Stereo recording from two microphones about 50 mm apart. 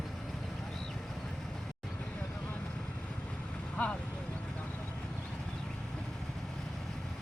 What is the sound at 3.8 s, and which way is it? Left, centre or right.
Vehicle, left.